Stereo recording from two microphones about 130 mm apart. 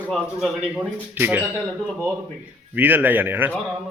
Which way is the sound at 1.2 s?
15° right (ahead or behind).